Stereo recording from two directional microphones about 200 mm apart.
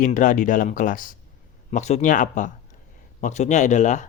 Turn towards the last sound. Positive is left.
turn(degrees=35)  # may be behind; listen again after turning